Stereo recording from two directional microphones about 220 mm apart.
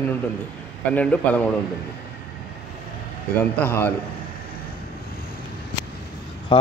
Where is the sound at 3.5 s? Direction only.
10° left (ahead or behind).